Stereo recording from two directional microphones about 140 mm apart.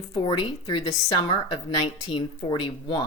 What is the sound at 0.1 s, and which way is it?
Speech, 35° left (ahead or behind).